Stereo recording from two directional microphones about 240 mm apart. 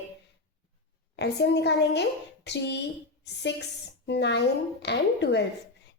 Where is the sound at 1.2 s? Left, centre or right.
Left.